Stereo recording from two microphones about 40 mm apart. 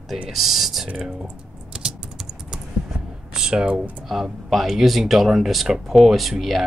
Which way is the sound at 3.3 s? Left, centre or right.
Centre.